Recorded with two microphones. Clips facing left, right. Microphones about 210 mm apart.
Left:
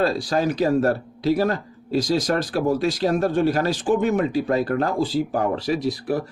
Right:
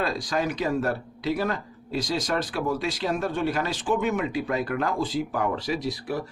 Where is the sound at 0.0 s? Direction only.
30° left (ahead or behind).